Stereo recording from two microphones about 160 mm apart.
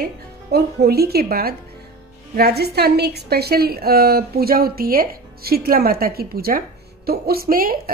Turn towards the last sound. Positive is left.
turn(degrees=-65)  # may be behind; listen again after turning